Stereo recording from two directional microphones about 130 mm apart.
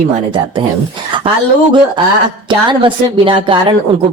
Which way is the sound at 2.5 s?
40° right (ahead or behind).